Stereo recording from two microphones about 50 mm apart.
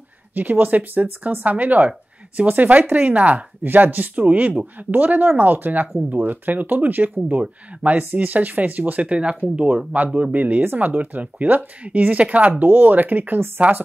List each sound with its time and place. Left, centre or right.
0.3 s speech: right
3.6 s speech: right